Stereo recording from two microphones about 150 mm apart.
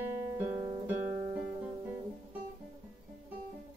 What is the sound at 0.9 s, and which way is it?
Guitar, 10° right (ahead or behind).